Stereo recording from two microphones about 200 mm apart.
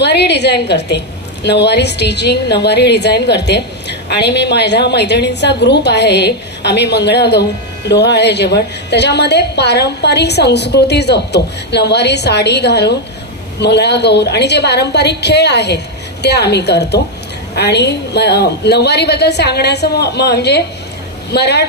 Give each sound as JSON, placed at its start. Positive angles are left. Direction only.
{"t": 0.0, "sound": "a woman's voice", "side_deg": 55}